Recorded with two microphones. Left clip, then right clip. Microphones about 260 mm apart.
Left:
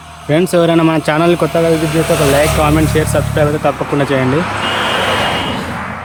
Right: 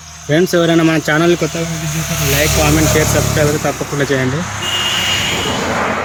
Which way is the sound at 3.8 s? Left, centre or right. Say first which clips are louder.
Left 2 dB; left.